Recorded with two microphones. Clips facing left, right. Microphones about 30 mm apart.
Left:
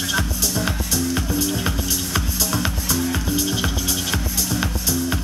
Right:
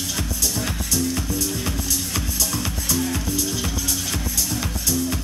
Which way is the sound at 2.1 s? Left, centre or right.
Left.